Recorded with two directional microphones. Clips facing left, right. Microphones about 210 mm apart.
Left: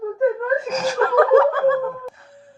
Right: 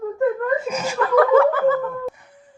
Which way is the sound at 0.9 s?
40° left (ahead or behind).